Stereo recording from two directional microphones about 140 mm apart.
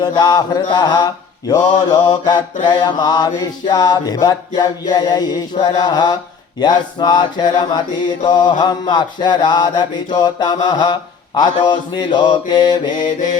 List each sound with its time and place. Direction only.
0.0 s mantra: 30° left (ahead or behind)